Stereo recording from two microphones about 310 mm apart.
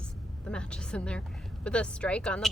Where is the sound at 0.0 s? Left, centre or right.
Centre.